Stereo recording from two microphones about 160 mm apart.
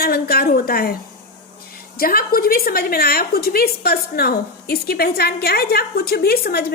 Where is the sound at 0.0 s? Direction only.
70° left (ahead or behind).